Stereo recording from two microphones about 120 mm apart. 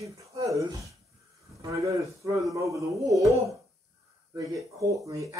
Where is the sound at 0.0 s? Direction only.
25° right (ahead or behind).